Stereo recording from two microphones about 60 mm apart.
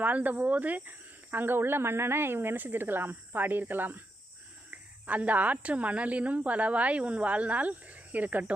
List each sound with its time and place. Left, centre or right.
0.0 s a woman's voice: right